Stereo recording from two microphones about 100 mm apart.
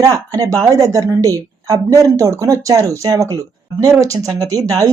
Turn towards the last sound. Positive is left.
turn(degrees=-35)  # may be behind; listen again after turning